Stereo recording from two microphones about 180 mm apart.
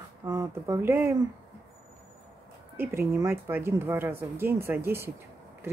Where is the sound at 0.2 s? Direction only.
15° right (ahead or behind).